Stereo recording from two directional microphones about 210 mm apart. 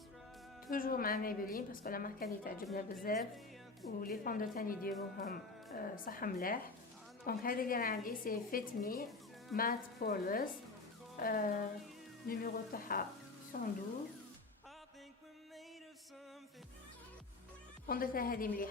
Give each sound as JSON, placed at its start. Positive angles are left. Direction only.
{"t": 0.7, "sound": "a woman's voice", "side_deg": 40}
{"t": 17.8, "sound": "a woman's voice", "side_deg": 45}